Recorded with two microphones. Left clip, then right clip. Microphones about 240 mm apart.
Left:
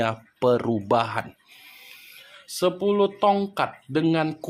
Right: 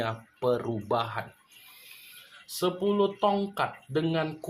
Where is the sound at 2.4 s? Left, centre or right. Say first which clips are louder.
Left 5 dB; left.